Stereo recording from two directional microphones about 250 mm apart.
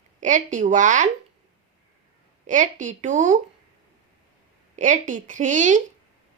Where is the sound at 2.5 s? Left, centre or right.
Right.